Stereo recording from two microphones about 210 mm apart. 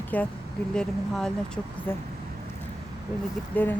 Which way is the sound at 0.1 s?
10° left (ahead or behind).